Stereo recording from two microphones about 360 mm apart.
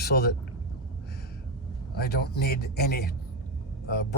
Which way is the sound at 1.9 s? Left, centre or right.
Left.